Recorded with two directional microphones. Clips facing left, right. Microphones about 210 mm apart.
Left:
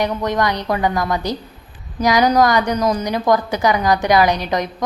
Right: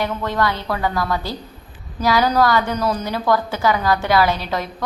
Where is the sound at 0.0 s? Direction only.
20° left (ahead or behind).